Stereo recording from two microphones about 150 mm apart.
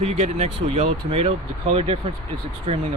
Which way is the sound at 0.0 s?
45° right (ahead or behind).